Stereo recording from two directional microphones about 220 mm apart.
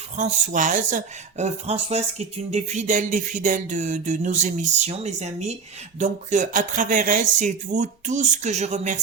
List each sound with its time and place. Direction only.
0.2 s speech: 35° right (ahead or behind)